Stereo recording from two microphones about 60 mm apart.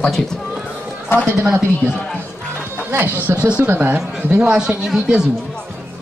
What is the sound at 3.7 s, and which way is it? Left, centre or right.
Speech, right.